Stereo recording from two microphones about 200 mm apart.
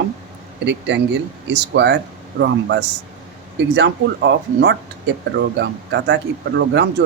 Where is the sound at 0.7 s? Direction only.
60° right (ahead or behind).